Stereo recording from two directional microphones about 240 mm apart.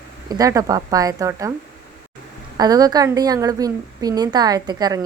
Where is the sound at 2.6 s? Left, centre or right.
Centre.